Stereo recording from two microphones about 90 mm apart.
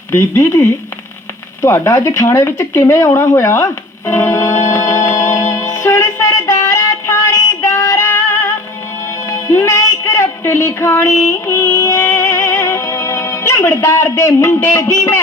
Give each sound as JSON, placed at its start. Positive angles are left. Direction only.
{"t": 0.1, "sound": "speech", "side_deg": 30}
{"t": 1.6, "sound": "a sound", "side_deg": 35}
{"t": 6.2, "sound": "synthetic singing", "side_deg": 40}
{"t": 9.3, "sound": "music", "side_deg": 30}